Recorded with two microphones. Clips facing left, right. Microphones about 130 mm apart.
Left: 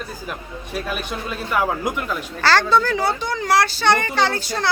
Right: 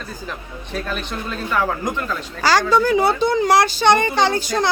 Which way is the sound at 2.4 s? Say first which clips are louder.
Right 1 dB; 10° right (ahead or behind).